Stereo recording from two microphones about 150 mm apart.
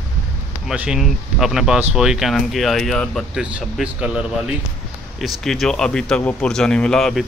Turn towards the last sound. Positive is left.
turn(degrees=0)  # may be behind; listen again after turning